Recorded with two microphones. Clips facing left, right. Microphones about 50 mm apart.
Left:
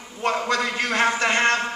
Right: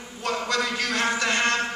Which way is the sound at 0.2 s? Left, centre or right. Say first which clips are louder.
Left 3 dB; left.